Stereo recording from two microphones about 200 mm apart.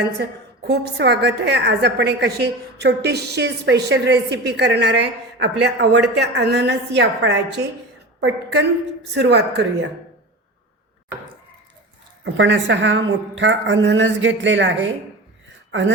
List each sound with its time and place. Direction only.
0.7 s a woman's voice: 60° right (ahead or behind)
12.2 s a woman's voice: 65° right (ahead or behind)